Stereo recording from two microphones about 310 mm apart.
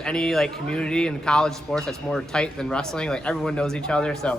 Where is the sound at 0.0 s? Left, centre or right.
Centre.